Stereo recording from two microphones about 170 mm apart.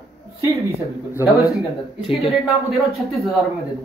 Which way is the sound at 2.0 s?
35° left (ahead or behind).